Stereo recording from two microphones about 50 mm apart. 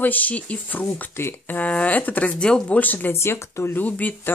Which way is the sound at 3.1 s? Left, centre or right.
Left.